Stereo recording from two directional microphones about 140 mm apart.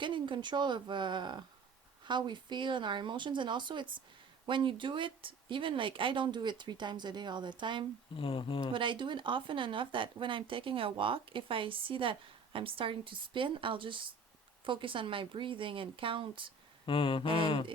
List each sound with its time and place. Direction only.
0.0 s speech: 35° right (ahead or behind)
8.1 s speech: 40° left (ahead or behind)
8.7 s speech: 35° right (ahead or behind)
16.8 s speech: 40° left (ahead or behind)